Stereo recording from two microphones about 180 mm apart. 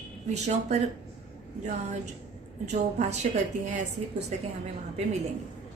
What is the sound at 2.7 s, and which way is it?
Speech, 40° right (ahead or behind).